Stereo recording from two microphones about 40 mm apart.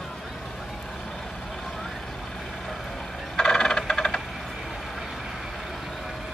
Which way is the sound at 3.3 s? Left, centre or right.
Centre.